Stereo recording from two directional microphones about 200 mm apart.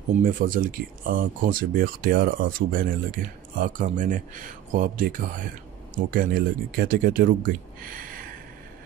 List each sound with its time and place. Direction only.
0.2 s speech: 45° right (ahead or behind)